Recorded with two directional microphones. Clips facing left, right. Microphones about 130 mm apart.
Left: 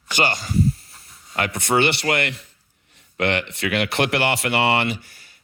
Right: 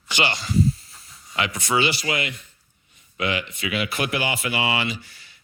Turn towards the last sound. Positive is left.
turn(degrees=45)  # may be behind; listen again after turning